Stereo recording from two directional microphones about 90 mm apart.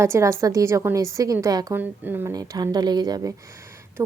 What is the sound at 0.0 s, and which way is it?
A woman's voice, 35° right (ahead or behind).